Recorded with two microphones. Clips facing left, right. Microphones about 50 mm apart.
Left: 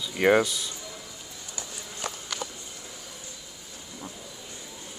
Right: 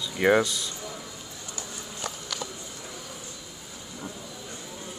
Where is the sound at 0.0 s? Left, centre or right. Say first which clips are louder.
Even; centre.